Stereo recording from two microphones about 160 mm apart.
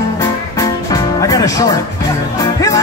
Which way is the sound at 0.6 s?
20° left (ahead or behind).